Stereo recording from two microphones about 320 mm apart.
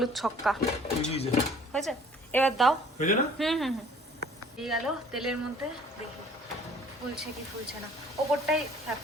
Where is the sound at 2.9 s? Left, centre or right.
Left.